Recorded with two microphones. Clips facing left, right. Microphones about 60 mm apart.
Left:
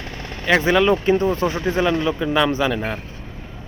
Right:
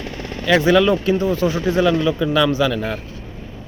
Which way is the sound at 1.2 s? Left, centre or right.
Left.